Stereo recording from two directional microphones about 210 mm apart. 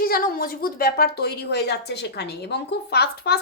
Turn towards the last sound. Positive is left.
turn(degrees=50)  # may be behind; listen again after turning